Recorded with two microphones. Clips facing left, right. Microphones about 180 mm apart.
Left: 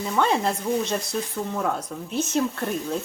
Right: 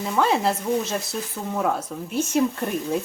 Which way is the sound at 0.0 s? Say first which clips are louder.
Right 1 dB; 5° right (ahead or behind).